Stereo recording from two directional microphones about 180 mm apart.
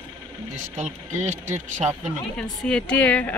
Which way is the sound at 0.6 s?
45° right (ahead or behind).